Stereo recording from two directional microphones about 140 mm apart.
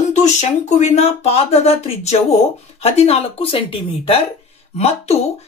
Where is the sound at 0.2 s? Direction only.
55° left (ahead or behind).